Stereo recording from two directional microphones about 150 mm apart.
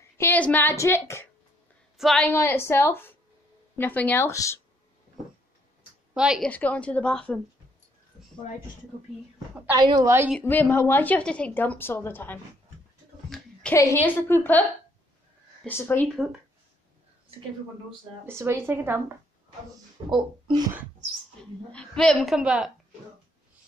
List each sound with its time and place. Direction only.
0.2 s a woman's voice: 10° left (ahead or behind)
2.0 s a woman's voice: centre (ahead or behind)
2.2 s a woman's voice: 15° left (ahead or behind)
6.1 s a woman's voice: 5° right (ahead or behind)
6.5 s a woman's voice: 10° left (ahead or behind)
9.8 s a woman's voice: 30° right (ahead or behind)
10.4 s a woman's voice: 10° left (ahead or behind)
13.3 s a sound: 5° left (ahead or behind)
13.7 s a woman's voice: 15° left (ahead or behind)
15.6 s a woman's voice: 15° left (ahead or behind)
18.2 s speech: 15° right (ahead or behind)
20.1 s a woman's voice: 30° right (ahead or behind)
21.4 s a woman's voice: 5° left (ahead or behind)